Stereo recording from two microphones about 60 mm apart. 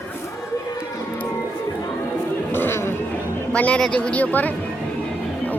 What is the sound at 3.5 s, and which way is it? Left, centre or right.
Speech, left.